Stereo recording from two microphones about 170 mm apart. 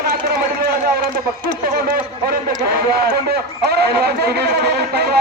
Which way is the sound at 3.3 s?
70° right (ahead or behind).